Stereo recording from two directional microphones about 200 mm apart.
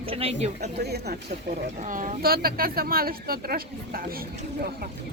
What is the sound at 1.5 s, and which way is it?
Speech, 40° right (ahead or behind).